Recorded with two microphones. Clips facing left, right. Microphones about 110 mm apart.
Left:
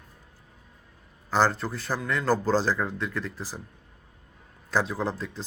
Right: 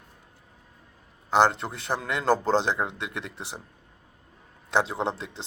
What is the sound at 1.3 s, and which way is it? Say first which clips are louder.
Speech: right 2 dB; 20° right (ahead or behind).